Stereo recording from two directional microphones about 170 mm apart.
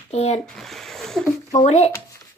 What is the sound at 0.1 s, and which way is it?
Speech, 40° left (ahead or behind).